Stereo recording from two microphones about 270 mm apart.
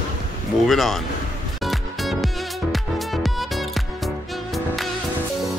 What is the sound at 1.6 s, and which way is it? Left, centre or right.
Music, centre.